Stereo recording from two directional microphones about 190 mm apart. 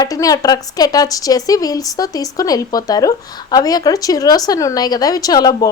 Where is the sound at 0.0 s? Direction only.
20° left (ahead or behind).